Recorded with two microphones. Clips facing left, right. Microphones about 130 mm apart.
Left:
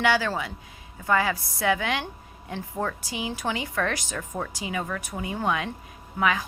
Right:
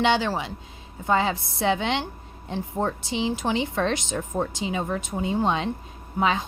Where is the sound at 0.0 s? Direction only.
25° right (ahead or behind).